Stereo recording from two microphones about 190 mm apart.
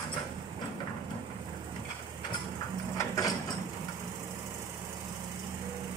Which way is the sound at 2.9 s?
20° left (ahead or behind).